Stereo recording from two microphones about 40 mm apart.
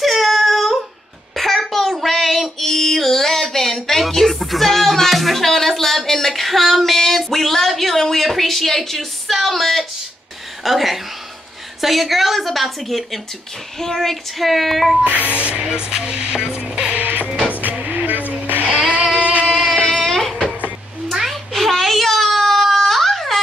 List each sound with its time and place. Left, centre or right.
0.0 s a sound: centre
2.0 s female singing: centre
10.6 s a woman's voice: centre
15.0 s speech: left
15.6 s music: centre
17.0 s music: right
19.1 s music: right
19.4 s a sound: centre
20.1 s a sound: centre
21.1 s baby cry: centre